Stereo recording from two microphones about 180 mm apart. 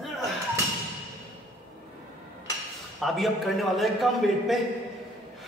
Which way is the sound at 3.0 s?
Centre (ahead or behind).